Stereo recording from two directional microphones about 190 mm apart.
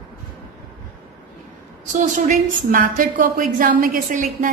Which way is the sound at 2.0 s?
40° right (ahead or behind).